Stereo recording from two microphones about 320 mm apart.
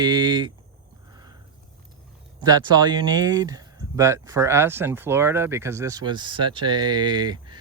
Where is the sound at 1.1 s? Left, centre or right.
Centre.